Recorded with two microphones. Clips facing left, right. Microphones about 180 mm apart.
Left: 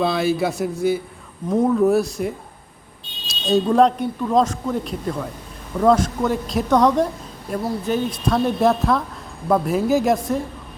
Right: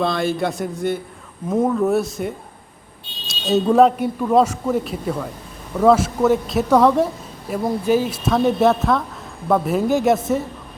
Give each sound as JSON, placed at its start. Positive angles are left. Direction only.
{"t": 0.0, "sound": "speech", "side_deg": 5}